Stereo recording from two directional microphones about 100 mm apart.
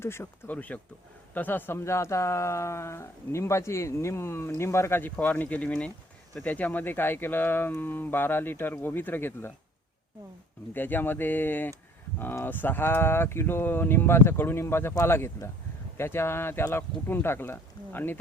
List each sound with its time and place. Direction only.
0.0 s speech: 25° left (ahead or behind)
10.8 s speech: 20° left (ahead or behind)